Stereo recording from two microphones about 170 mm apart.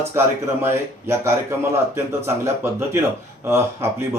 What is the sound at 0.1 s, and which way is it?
Speech, 15° right (ahead or behind).